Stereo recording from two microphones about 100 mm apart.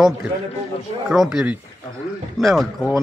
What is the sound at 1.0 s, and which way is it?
Speech, 5° right (ahead or behind).